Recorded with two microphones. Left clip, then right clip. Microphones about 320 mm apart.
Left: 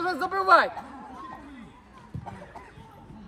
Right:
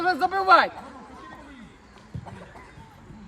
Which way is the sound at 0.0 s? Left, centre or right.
Right.